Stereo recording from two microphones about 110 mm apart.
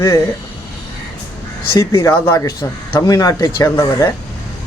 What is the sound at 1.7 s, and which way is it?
Speech, 30° left (ahead or behind).